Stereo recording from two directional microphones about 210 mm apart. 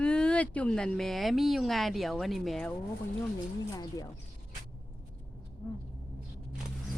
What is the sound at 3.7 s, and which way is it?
Speech, 15° left (ahead or behind).